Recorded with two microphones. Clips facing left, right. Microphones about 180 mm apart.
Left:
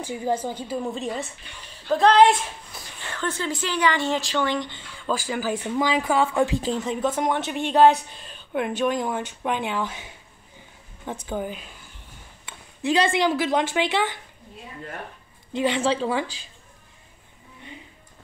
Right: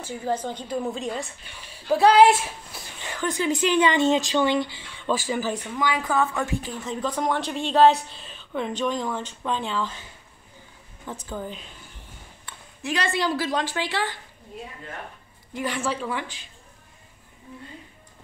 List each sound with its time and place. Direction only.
0.0 s speech: 15° left (ahead or behind)
5.8 s speech: 20° left (ahead or behind)
12.4 s a sound: 30° left (ahead or behind)
13.2 s speech: 20° left (ahead or behind)
15.5 s speech: 20° left (ahead or behind)